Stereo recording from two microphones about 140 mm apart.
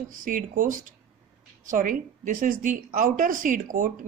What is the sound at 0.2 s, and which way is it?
A woman's voice, 75° right (ahead or behind).